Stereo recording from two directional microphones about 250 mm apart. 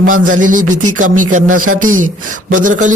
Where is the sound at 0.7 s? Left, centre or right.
Right.